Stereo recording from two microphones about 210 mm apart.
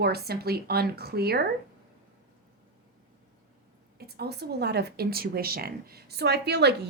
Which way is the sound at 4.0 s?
50° right (ahead or behind).